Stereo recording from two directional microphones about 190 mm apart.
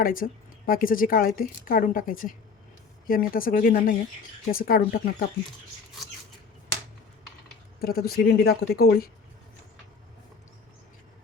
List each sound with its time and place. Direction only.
0.0 s speech: 50° left (ahead or behind)
7.8 s speech: 55° left (ahead or behind)